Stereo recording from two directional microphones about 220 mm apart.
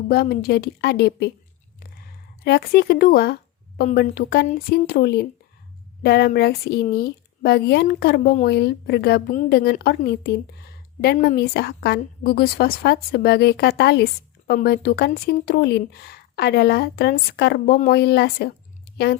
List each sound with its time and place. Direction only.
0.1 s a woman's voice: 45° left (ahead or behind)
1.8 s a sound: 45° left (ahead or behind)
3.8 s a woman's voice: 45° left (ahead or behind)